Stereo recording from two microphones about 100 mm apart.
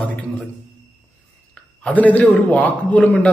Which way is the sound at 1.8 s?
15° left (ahead or behind).